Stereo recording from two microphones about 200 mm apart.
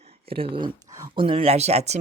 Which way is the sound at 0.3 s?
25° right (ahead or behind).